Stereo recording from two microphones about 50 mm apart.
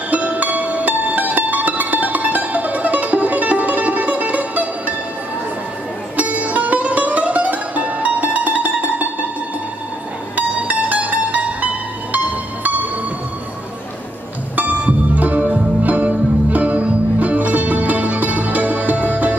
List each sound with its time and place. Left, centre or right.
0.1 s music: right
6.1 s music: right
10.3 s music: right
14.5 s music: right